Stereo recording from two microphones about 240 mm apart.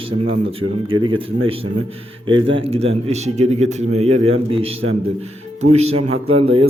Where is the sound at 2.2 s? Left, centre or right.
Right.